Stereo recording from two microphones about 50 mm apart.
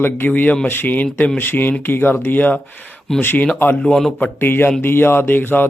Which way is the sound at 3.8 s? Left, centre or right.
Centre.